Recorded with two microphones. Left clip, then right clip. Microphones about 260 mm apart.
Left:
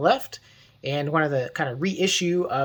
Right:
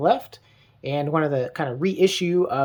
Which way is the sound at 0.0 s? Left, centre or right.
Centre.